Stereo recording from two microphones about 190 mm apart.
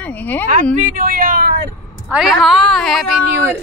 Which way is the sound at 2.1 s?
Centre (ahead or behind).